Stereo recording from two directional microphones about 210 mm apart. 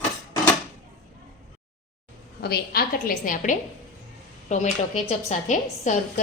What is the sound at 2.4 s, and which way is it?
A woman's voice, 45° left (ahead or behind).